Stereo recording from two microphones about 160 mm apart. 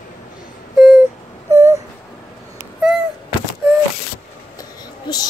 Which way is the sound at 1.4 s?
20° right (ahead or behind).